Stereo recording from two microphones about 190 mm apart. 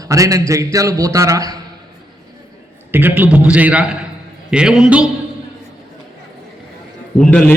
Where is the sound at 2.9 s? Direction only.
10° right (ahead or behind).